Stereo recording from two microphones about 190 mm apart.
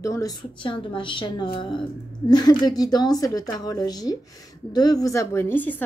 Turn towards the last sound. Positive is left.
turn(degrees=10)  # may be behind; listen again after turning